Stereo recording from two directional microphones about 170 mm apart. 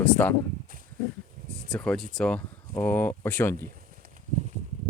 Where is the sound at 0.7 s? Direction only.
55° right (ahead or behind).